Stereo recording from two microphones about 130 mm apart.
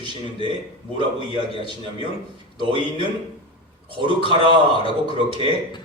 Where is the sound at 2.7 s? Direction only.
40° right (ahead or behind).